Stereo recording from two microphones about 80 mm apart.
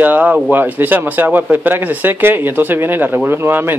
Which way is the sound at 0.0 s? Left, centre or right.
Centre.